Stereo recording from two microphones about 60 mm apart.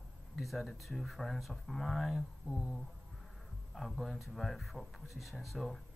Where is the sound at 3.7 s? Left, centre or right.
Centre.